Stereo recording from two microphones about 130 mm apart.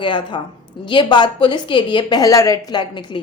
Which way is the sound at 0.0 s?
40° left (ahead or behind).